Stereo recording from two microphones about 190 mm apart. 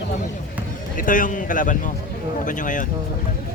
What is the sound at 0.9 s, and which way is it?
Speech, 45° left (ahead or behind).